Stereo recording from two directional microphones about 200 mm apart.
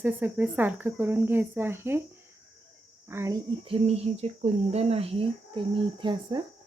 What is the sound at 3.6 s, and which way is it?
Speech, 30° right (ahead or behind).